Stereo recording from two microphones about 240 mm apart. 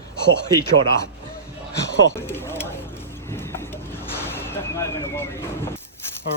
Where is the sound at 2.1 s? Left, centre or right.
Centre.